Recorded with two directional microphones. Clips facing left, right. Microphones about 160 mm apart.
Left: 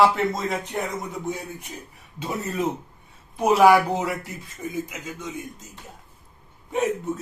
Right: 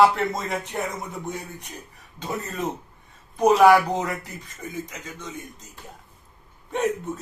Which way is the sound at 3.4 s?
5° left (ahead or behind).